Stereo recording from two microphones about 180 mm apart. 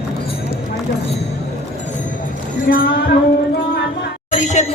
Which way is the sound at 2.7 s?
55° left (ahead or behind).